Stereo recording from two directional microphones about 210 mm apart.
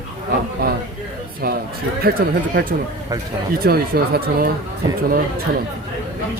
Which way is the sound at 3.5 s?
45° right (ahead or behind).